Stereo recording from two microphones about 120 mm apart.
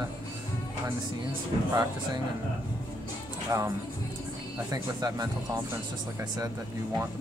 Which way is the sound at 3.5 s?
30° right (ahead or behind).